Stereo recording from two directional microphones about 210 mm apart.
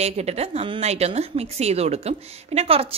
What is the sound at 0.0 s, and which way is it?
Speech, 30° right (ahead or behind).